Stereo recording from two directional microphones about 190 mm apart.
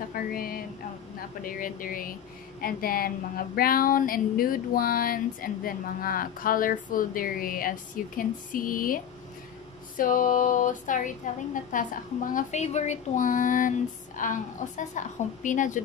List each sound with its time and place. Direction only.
0.1 s speech: 50° left (ahead or behind)